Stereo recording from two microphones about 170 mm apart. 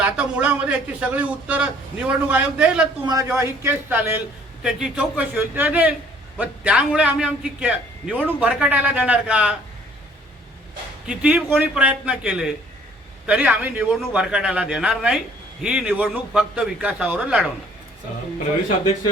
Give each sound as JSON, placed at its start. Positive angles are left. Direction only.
{"t": 0.0, "sound": "a man's voice", "side_deg": -5}
{"t": 3.1, "sound": "a man's voice", "side_deg": -20}
{"t": 11.0, "sound": "a man's voice", "side_deg": -5}